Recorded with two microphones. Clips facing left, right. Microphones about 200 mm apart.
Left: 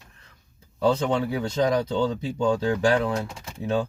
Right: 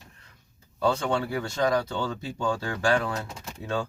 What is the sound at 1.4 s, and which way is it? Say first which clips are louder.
Speech: left 3 dB; 20° left (ahead or behind).